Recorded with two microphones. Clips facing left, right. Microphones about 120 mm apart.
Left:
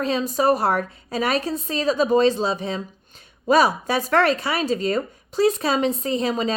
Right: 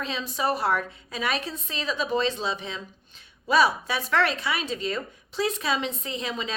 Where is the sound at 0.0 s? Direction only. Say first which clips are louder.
Left 8 dB; 45° left (ahead or behind).